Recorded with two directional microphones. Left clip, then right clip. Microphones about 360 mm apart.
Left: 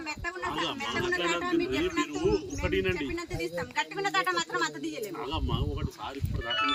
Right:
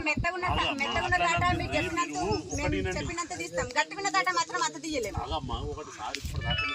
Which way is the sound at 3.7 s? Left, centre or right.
Centre.